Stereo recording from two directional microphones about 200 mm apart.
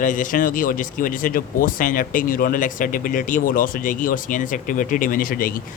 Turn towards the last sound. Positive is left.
turn(degrees=45)  # may be behind; listen again after turning